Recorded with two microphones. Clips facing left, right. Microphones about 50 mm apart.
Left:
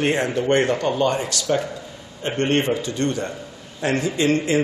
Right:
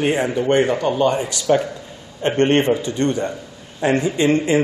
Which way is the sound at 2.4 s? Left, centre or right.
Right.